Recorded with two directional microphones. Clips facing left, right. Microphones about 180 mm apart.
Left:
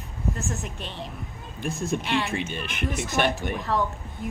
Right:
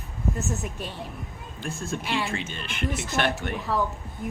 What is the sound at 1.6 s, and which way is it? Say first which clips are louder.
Speech: left 3 dB; 15° left (ahead or behind).